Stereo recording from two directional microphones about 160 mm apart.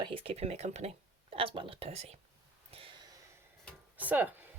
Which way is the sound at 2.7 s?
35° right (ahead or behind).